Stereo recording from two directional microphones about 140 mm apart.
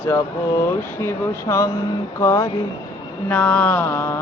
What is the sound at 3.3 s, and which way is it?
Speech, 10° left (ahead or behind).